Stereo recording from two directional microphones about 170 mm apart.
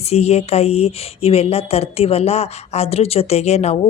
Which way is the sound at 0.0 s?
40° left (ahead or behind).